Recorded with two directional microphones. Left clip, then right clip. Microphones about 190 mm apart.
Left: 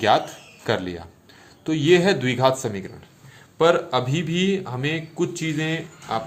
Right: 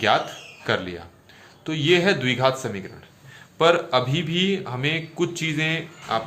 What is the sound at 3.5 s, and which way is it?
A man's voice, 10° left (ahead or behind).